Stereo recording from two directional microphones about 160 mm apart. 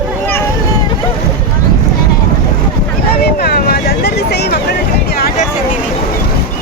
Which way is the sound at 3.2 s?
80° left.